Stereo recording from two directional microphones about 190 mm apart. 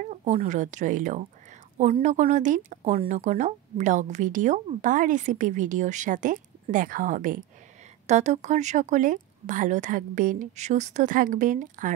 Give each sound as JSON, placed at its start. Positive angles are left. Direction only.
{"t": 0.1, "sound": "speech", "side_deg": -35}